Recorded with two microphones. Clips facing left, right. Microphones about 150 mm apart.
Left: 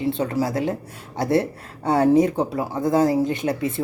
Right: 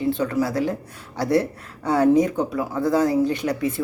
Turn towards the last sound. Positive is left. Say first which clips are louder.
# even
turn(degrees=25)  # may be behind; listen again after turning